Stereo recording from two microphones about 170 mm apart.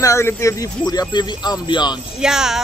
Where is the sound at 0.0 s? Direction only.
15° left (ahead or behind).